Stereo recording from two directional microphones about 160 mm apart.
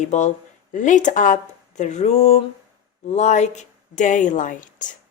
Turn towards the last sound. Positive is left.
turn(degrees=55)  # may be behind; listen again after turning